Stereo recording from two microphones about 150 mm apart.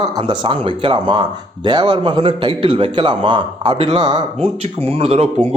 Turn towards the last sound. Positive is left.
turn(degrees=-40)  # may be behind; listen again after turning